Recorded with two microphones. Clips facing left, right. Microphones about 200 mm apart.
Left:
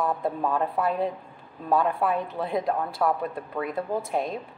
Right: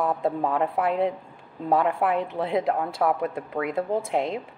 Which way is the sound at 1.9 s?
20° right (ahead or behind).